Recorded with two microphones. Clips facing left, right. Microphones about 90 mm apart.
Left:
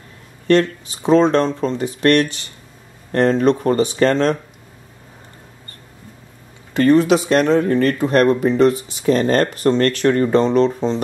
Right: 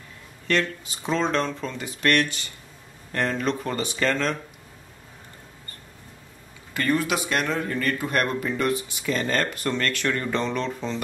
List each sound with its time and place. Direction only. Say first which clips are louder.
0.5 s speech: left 10 dB; 40° left (ahead or behind)
6.7 s speech: left 11 dB; 30° left (ahead or behind)